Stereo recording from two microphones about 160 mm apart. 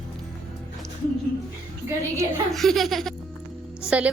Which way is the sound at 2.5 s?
Centre (ahead or behind).